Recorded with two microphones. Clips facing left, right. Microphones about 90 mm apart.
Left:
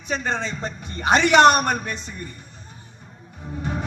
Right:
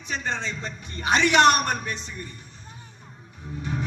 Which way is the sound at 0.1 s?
45° left (ahead or behind).